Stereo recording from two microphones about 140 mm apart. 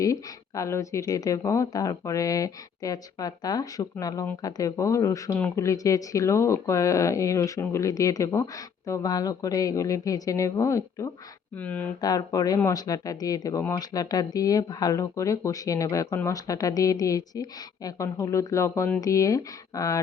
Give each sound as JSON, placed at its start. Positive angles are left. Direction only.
{"t": 0.0, "sound": "speech", "side_deg": 20}
{"t": 11.5, "sound": "speech", "side_deg": 10}
{"t": 11.9, "sound": "speech", "side_deg": 25}